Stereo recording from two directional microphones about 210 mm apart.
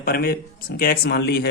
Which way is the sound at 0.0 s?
45° left (ahead or behind).